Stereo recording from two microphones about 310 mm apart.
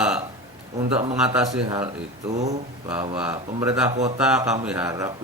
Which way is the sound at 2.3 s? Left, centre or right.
Right.